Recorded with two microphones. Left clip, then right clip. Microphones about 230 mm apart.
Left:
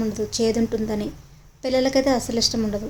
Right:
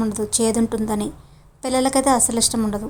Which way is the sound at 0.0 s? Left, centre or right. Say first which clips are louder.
Right 1 dB; centre.